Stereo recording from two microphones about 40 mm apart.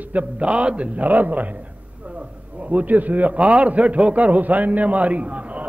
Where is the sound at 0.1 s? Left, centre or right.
Right.